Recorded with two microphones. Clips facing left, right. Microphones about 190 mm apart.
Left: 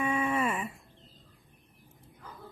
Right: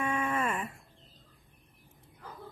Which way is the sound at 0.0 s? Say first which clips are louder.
Left 2 dB; 10° left (ahead or behind).